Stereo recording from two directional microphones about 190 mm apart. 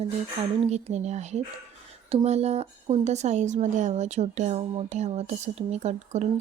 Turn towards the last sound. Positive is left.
turn(degrees=-35)  # may be behind; listen again after turning